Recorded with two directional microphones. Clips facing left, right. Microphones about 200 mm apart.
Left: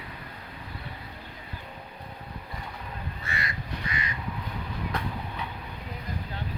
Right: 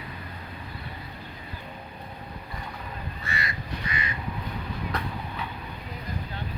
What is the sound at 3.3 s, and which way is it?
Crow, 50° left (ahead or behind).